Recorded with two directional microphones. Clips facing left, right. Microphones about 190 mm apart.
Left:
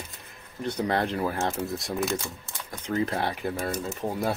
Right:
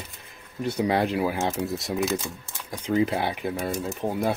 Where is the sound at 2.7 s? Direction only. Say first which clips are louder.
Right 4 dB; 15° right (ahead or behind).